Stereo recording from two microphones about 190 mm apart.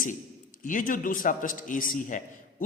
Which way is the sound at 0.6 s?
45° left (ahead or behind).